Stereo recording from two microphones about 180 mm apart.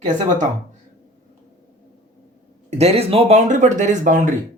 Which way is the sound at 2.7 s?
35° right (ahead or behind).